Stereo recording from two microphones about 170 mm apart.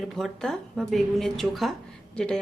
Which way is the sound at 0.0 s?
Centre (ahead or behind).